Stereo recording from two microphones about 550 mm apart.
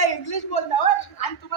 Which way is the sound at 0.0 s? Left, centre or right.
Left.